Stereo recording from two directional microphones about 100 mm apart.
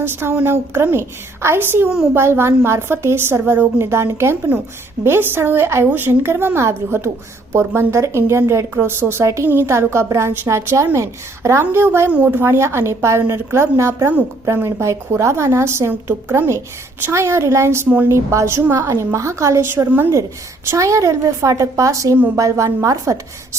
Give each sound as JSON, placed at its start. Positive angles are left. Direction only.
{"t": 0.0, "sound": "a woman's voice", "side_deg": -25}
{"t": 12.1, "sound": "speech", "side_deg": -10}
{"t": 12.4, "sound": "a woman's voice", "side_deg": -25}
{"t": 17.8, "sound": "speech", "side_deg": -15}
{"t": 18.1, "sound": "a woman's voice", "side_deg": -30}